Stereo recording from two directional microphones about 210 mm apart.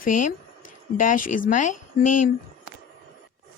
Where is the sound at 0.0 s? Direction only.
40° left (ahead or behind).